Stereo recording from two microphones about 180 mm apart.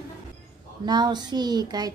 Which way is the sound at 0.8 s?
25° right (ahead or behind).